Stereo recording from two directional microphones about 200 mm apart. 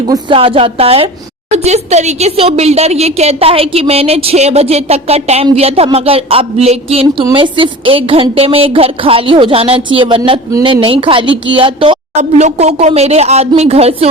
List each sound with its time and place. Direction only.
0.1 s a woman's voice: 25° right (ahead or behind)